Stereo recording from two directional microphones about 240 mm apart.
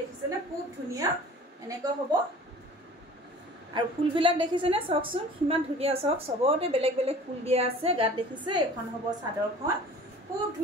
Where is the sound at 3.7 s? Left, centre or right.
Centre.